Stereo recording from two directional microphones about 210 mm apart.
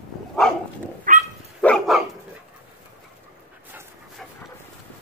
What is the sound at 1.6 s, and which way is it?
Dog, centre (ahead or behind).